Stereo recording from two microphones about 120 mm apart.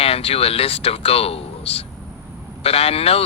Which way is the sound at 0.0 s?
55° left (ahead or behind).